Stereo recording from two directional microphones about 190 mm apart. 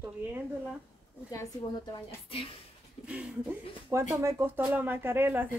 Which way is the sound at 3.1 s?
5° right (ahead or behind).